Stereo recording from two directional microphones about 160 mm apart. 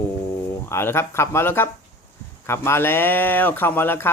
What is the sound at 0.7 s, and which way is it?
Speech, 15° left (ahead or behind).